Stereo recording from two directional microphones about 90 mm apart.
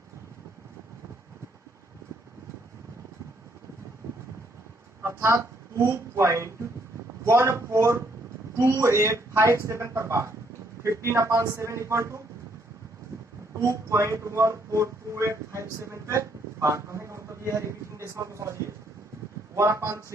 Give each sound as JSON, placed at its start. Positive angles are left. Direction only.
{"t": 4.0, "sound": "vehicle", "side_deg": -35}
{"t": 5.0, "sound": "speech", "side_deg": -30}
{"t": 13.6, "sound": "speech", "side_deg": -35}